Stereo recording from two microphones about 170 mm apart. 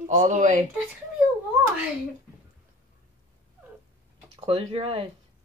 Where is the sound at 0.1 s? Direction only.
50° right (ahead or behind).